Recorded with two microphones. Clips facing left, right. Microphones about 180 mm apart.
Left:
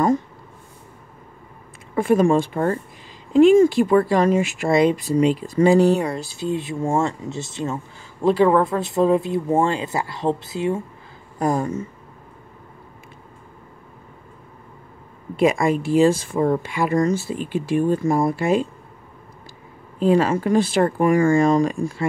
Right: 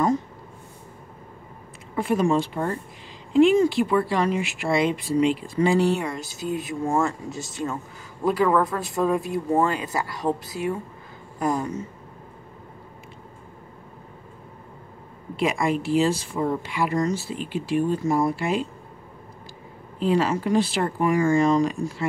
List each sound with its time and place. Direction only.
2.0 s speech: 50° left (ahead or behind); by 10.8 s 25° left (ahead or behind)
11.3 s a sound: 40° left (ahead or behind)
15.3 s speech: 50° left (ahead or behind)
20.2 s speech: 50° left (ahead or behind)